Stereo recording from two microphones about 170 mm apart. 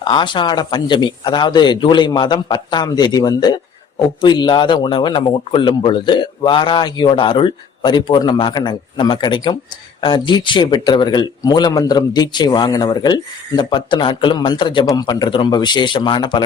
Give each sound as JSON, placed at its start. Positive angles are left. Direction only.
{"t": 0.0, "sound": "speech", "side_deg": 30}